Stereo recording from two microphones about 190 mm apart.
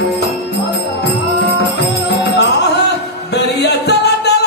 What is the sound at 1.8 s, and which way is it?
Music, 60° left (ahead or behind).